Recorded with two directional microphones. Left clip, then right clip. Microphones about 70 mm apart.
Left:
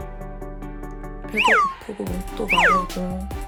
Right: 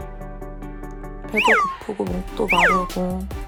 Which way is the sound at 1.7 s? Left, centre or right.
Centre.